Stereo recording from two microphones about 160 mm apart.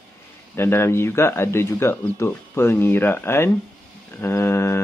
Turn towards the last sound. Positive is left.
turn(degrees=15)  # may be behind; listen again after turning